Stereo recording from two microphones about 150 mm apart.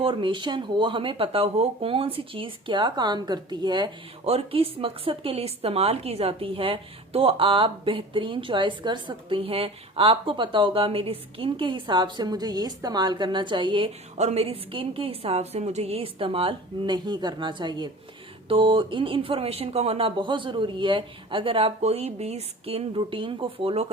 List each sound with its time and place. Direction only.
0.0 s speech: 35° right (ahead or behind)